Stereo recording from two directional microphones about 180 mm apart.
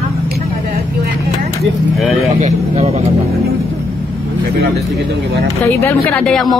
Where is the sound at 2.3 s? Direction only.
40° right (ahead or behind).